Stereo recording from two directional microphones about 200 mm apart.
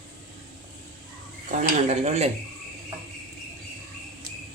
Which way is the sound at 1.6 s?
30° right (ahead or behind).